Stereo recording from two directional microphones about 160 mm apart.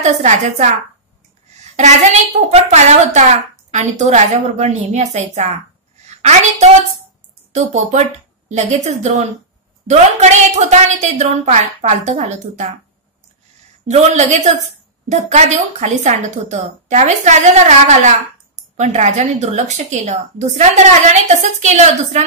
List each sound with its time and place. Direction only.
0.0 s a woman's voice: 45° right (ahead or behind)
1.6 s a sound: 50° right (ahead or behind)
2.5 s a woman's voice: 45° right (ahead or behind)
7.5 s a woman's voice: 45° right (ahead or behind)
13.8 s a woman's voice: 45° right (ahead or behind)